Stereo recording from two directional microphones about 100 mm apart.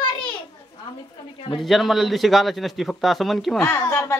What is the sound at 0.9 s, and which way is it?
Speech, 55° left (ahead or behind).